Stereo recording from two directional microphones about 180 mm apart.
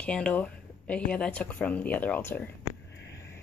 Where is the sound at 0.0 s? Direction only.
5° left (ahead or behind).